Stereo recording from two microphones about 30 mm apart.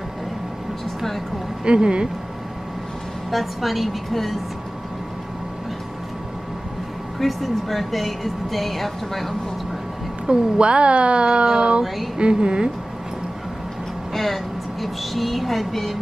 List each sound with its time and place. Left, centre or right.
1.6 s speech: right
3.3 s speech: centre
7.2 s speech: centre
10.2 s speech: right
14.1 s speech: centre